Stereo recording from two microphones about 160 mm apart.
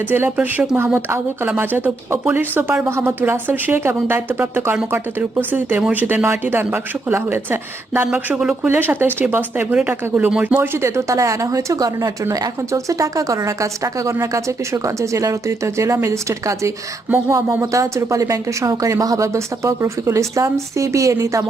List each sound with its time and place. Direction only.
0.1 s speech: 10° right (ahead or behind)